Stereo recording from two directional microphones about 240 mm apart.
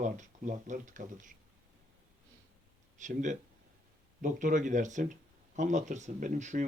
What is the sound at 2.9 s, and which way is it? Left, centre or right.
Speech, right.